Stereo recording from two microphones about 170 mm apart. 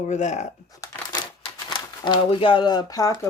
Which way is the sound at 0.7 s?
20° left (ahead or behind).